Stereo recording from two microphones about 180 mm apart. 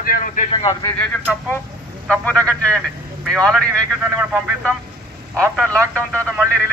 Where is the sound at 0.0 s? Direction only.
50° left (ahead or behind).